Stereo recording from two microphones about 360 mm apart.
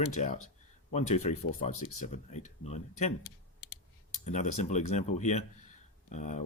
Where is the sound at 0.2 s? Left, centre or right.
Centre.